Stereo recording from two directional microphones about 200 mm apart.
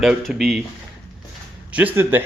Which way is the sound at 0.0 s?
Centre (ahead or behind).